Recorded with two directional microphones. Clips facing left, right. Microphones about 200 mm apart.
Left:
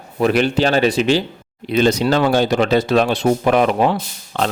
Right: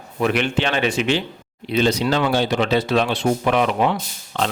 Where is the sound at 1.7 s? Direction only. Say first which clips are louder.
Left 3 dB; 50° left (ahead or behind).